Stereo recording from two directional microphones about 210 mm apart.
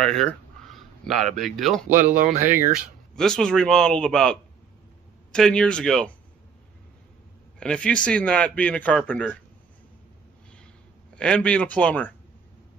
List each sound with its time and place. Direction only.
0.0 s speech: 5° left (ahead or behind)
2.1 s speech: 40° right (ahead or behind)
3.2 s speech: 5° left (ahead or behind)
7.5 s speech: 5° left (ahead or behind)
11.1 s speech: 5° left (ahead or behind)